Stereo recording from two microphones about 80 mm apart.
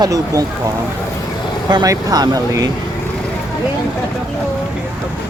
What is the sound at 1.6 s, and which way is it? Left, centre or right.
Speech, right.